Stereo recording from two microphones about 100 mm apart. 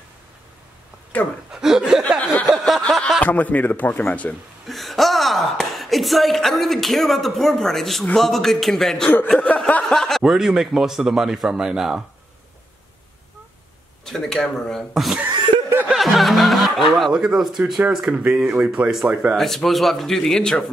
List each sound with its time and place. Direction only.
1.1 s a man's voice: 15° left (ahead or behind)
1.5 s speech: 5° right (ahead or behind)
1.9 s a sound: centre (ahead or behind)
2.8 s chuckle: 5° left (ahead or behind)
3.2 s a man's voice: 15° left (ahead or behind)
4.6 s a woman's voice: centre (ahead or behind)
14.0 s a man's voice: 5° left (ahead or behind)